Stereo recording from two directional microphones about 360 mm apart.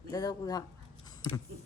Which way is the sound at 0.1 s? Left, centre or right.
Centre.